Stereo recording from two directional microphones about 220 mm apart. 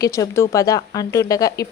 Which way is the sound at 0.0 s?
15° left (ahead or behind).